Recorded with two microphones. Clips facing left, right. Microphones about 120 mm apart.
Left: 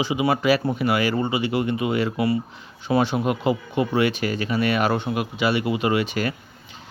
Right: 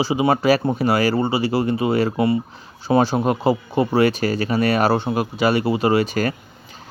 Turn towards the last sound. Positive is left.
turn(degrees=-40)  # may be behind; listen again after turning